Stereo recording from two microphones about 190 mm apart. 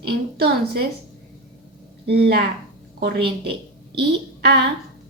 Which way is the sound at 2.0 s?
60° right (ahead or behind).